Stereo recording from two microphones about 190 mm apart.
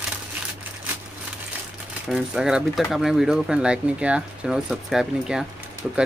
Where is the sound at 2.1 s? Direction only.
5° right (ahead or behind).